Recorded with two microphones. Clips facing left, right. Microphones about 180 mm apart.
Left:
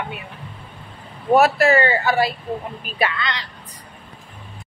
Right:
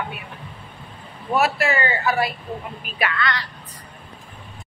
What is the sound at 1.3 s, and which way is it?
Speech, 40° left (ahead or behind).